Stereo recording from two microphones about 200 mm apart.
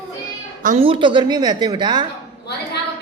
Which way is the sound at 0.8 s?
25° right (ahead or behind).